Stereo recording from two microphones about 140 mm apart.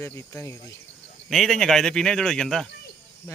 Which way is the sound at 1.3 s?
Centre (ahead or behind).